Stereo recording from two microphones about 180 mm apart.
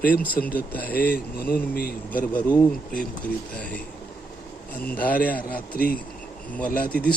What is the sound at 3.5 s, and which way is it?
Speech, 10° left (ahead or behind).